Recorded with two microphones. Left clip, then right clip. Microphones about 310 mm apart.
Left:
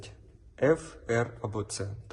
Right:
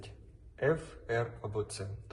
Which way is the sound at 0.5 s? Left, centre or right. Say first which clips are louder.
Left 6 dB; left.